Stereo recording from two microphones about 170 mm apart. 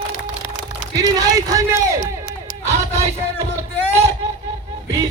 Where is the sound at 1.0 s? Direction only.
20° right (ahead or behind).